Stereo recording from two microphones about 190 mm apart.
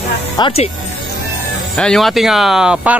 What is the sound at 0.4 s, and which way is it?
Speech, 30° left (ahead or behind).